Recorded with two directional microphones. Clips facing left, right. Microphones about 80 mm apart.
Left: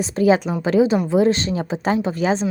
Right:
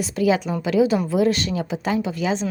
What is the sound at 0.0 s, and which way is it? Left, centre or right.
A woman's voice, left.